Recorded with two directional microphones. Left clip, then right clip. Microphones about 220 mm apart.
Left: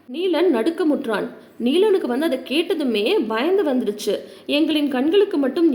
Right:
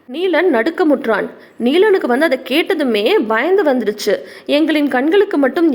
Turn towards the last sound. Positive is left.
turn(degrees=-20)  # may be behind; listen again after turning